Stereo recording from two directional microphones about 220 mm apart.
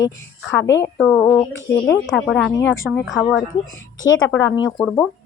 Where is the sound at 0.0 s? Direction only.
15° left (ahead or behind).